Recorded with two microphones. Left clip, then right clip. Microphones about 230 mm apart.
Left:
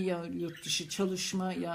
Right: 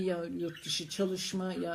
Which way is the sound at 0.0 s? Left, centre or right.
Left.